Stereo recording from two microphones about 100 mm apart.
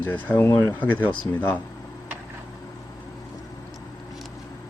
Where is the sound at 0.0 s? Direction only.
20° left (ahead or behind).